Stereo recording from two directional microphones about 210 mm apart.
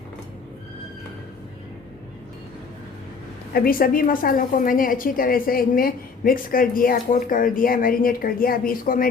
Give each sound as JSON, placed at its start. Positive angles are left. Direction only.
{"t": 3.5, "sound": "a woman's voice", "side_deg": 45}